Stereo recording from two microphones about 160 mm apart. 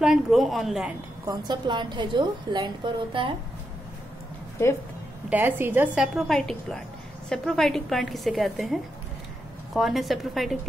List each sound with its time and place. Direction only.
0.0 s a woman's voice: 5° right (ahead or behind)
1.2 s a woman's voice: 25° right (ahead or behind)
5.3 s a woman's voice: 10° right (ahead or behind)
6.1 s a woman's voice: centre (ahead or behind)
9.8 s a woman's voice: centre (ahead or behind)